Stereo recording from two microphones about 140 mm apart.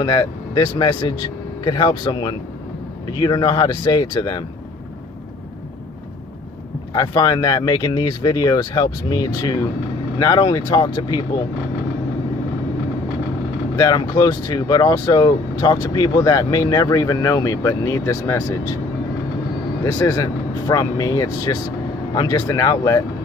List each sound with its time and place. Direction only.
0.0 s speech: 25° left (ahead or behind)
6.9 s speech: 30° left (ahead or behind)
13.7 s speech: 30° left (ahead or behind)
19.8 s speech: 25° left (ahead or behind)